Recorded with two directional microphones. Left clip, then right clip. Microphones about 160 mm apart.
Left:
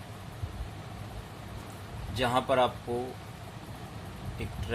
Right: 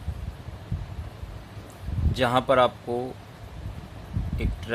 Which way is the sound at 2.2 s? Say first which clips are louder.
Right 6 dB; 65° right (ahead or behind).